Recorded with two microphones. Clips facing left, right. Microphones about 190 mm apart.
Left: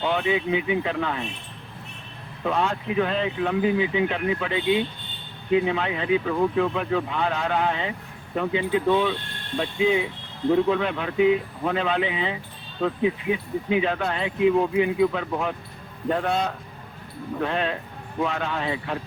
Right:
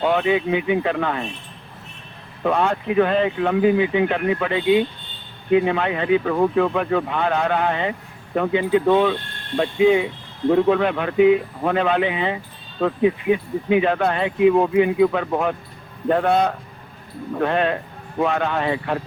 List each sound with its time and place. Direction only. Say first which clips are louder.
0.0 s speech: right 5 dB; 60° right (ahead or behind)
2.4 s speech: right 5 dB; 60° right (ahead or behind)